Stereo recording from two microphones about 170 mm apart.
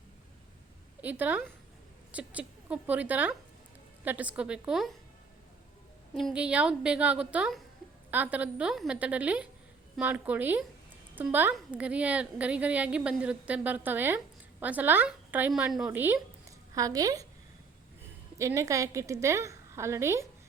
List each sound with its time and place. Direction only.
1.0 s a woman's voice: 10° right (ahead or behind)
6.1 s a woman's voice: 5° right (ahead or behind); by 17.2 s 20° right (ahead or behind)
18.3 s a woman's voice: 20° right (ahead or behind)